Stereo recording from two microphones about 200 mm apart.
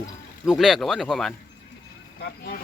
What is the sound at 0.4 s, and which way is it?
Speech, centre (ahead or behind).